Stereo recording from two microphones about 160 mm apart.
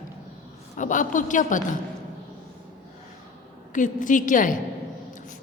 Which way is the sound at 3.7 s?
55° left (ahead or behind).